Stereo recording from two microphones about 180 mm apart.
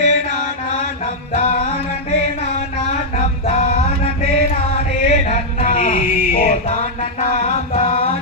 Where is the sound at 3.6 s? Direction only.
35° left (ahead or behind).